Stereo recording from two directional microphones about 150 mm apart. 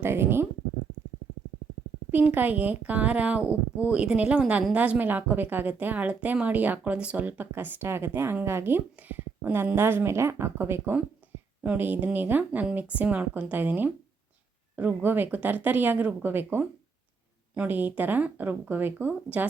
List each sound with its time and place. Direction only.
0.0 s speech: 15° right (ahead or behind)
2.1 s speech: 10° right (ahead or behind)
11.2 s a sound: 10° right (ahead or behind)
11.6 s speech: 10° right (ahead or behind)